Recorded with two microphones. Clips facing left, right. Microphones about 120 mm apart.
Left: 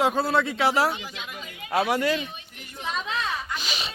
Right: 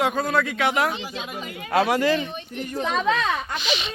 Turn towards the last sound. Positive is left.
turn(degrees=40)  # may be behind; listen again after turning